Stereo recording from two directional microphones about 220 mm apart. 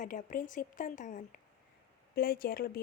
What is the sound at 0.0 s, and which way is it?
Speech, 35° left (ahead or behind).